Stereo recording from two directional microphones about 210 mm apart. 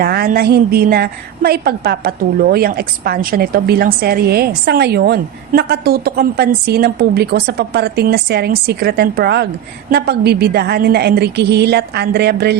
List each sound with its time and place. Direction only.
0.0 s a woman's voice: 45° right (ahead or behind)